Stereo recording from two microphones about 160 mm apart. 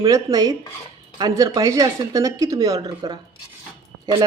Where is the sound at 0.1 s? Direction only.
25° right (ahead or behind).